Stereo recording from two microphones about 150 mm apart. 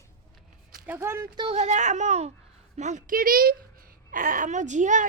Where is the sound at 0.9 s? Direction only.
15° right (ahead or behind).